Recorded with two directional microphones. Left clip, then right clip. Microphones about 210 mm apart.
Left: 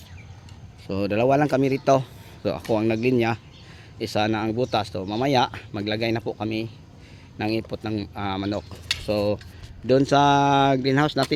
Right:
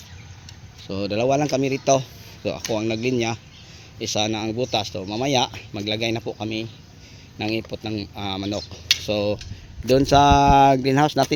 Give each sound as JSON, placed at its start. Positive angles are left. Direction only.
{"t": 0.9, "sound": "speech", "side_deg": 10}